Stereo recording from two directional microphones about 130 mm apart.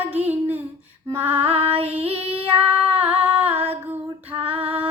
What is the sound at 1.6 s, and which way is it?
Female singing, 45° right (ahead or behind).